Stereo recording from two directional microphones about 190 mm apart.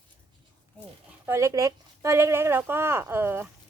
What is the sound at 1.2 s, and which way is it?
Speech, 15° right (ahead or behind).